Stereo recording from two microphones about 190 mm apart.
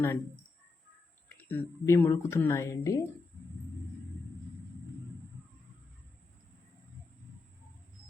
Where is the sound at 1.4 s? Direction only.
10° left (ahead or behind).